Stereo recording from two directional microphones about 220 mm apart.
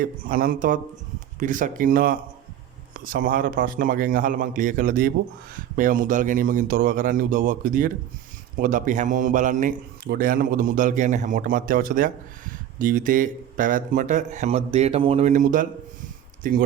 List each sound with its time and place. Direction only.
0.0 s a man's voice: 40° right (ahead or behind)